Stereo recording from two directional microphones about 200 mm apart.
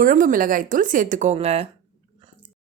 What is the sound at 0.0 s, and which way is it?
A woman's voice, 40° right (ahead or behind).